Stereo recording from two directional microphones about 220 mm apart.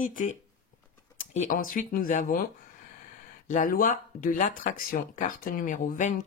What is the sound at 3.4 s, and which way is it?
Speech, 35° left (ahead or behind).